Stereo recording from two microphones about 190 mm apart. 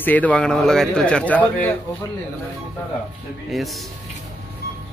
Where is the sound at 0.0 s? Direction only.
10° left (ahead or behind).